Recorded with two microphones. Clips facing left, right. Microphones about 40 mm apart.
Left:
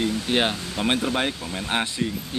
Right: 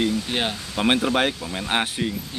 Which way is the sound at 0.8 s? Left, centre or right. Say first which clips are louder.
Right 4 dB; right.